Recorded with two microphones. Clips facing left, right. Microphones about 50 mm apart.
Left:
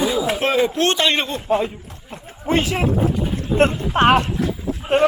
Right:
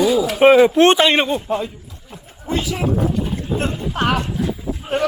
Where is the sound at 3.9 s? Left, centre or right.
Left.